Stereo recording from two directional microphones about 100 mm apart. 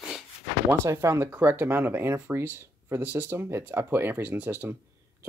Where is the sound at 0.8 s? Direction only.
25° right (ahead or behind).